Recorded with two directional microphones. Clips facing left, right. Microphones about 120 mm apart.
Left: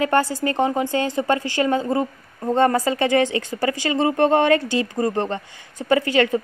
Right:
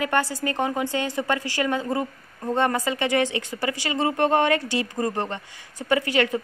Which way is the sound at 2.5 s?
35° left (ahead or behind).